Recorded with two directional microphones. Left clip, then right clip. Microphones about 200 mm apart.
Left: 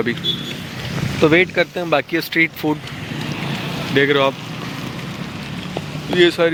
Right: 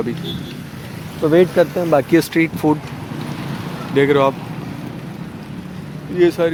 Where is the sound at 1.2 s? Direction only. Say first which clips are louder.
Even; 45° left (ahead or behind).